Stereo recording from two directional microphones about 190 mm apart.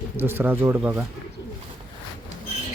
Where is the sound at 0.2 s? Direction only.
10° right (ahead or behind).